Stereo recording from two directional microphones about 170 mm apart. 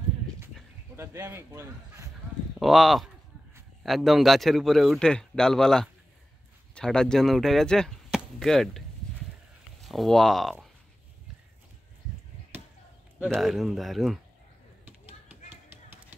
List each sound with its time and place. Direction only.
0.9 s speech: 15° right (ahead or behind)
2.6 s a man's voice: centre (ahead or behind)
6.7 s chop: 5° left (ahead or behind)
9.8 s a man's voice: centre (ahead or behind)
12.5 s chop: 10° right (ahead or behind)
13.2 s a man's voice: centre (ahead or behind)